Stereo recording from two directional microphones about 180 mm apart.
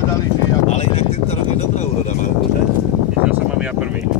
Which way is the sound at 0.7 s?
35° left (ahead or behind).